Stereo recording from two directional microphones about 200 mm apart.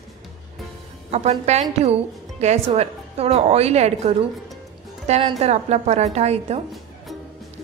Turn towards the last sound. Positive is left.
turn(degrees=-30)  # may be behind; listen again after turning